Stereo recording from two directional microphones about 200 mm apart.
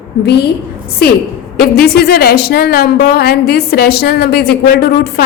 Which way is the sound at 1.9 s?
50° left (ahead or behind).